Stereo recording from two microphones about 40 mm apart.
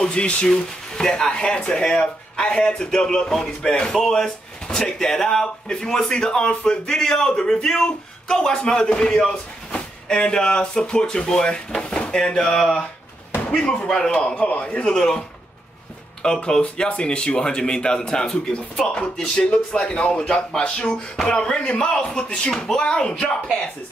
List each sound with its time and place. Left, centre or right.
0.0 s speech: left
7.0 s speech: centre
8.5 s speech: left
13.8 s speech: centre
14.4 s a man's voice: left
14.9 s speech: centre
16.4 s speech: left